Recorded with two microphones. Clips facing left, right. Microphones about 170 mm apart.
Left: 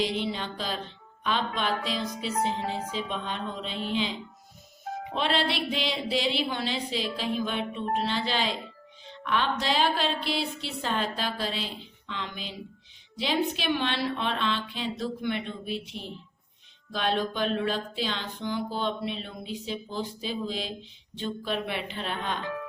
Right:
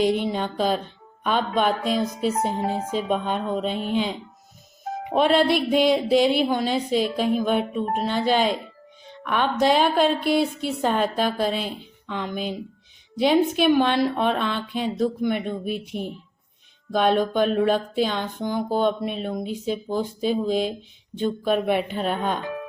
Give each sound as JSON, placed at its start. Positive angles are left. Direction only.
{"t": 0.0, "sound": "music", "side_deg": -50}
{"t": 5.1, "sound": "music", "side_deg": -50}